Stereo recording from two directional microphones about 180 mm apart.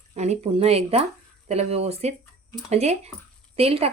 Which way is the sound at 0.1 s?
40° right (ahead or behind).